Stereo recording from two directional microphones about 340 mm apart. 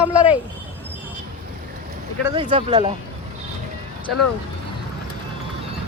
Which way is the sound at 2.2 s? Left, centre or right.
Centre.